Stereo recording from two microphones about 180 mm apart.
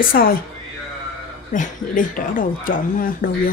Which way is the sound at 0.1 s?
55° left (ahead or behind).